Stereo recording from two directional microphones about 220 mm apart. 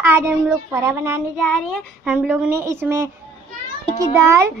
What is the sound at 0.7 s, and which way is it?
A child's voice, 15° right (ahead or behind).